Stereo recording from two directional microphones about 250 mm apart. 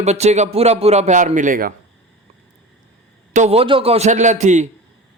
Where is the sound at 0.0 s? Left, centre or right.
Right.